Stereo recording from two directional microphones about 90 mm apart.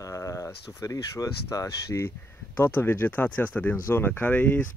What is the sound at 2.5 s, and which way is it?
Speech, 25° left (ahead or behind).